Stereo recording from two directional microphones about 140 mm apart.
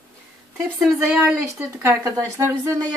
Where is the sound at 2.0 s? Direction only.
20° right (ahead or behind).